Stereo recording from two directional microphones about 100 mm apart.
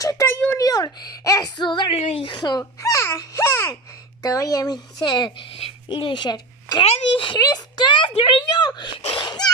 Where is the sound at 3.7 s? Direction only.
35° left (ahead or behind).